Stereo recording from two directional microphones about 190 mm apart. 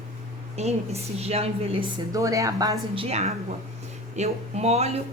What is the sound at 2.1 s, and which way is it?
A woman's voice, 15° right (ahead or behind).